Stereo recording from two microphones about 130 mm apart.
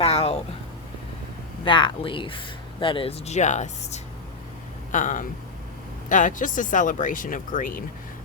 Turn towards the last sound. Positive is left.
turn(degrees=90)